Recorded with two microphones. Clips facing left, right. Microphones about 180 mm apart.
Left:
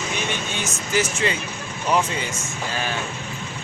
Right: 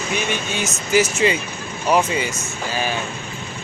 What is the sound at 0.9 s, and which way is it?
Speech, 10° right (ahead or behind).